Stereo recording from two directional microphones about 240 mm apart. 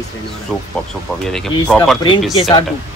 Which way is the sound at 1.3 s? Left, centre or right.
Centre.